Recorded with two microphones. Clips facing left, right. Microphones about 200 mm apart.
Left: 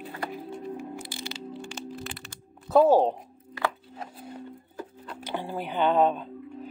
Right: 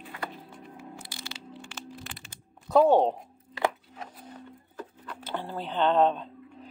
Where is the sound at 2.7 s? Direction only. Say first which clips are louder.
Left 1 dB; 5° left (ahead or behind).